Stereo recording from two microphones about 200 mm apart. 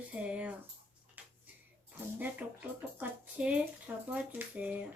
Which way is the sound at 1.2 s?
5° right (ahead or behind).